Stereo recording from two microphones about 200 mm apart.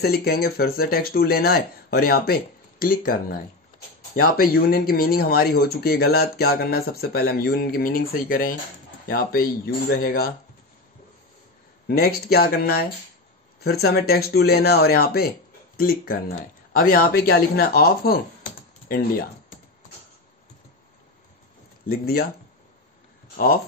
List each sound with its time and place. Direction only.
0.0 s speech: 50° left (ahead or behind)
11.9 s speech: 50° left (ahead or behind)
21.8 s speech: 50° left (ahead or behind)